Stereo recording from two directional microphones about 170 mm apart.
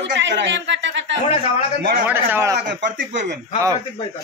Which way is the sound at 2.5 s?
90° right.